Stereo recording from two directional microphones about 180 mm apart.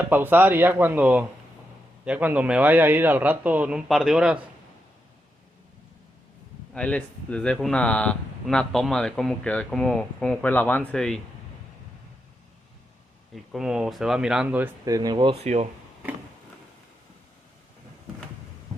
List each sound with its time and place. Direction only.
0.0 s a man's voice: 10° right (ahead or behind)
6.7 s speech: 5° left (ahead or behind)
13.3 s speech: centre (ahead or behind); by 15.4 s 25° right (ahead or behind)
15.4 s speech: 40° right (ahead or behind)